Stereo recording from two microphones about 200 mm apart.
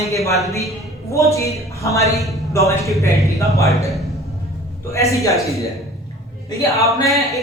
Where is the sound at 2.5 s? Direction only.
15° left (ahead or behind).